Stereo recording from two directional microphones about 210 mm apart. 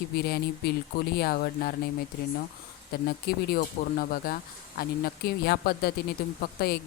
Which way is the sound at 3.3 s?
45° left (ahead or behind).